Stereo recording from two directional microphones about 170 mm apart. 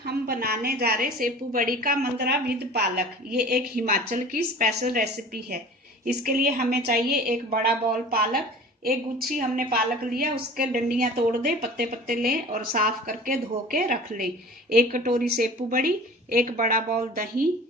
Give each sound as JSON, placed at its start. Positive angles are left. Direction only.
{"t": 0.0, "sound": "speech", "side_deg": -65}
{"t": 3.6, "sound": "speech", "side_deg": -55}
{"t": 8.8, "sound": "speech", "side_deg": -60}